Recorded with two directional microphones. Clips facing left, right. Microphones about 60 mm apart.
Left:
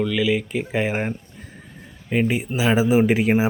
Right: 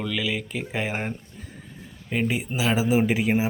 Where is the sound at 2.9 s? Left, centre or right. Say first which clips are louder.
Left 4 dB; centre.